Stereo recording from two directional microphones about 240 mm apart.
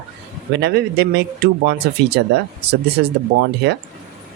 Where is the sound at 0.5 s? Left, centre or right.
Right.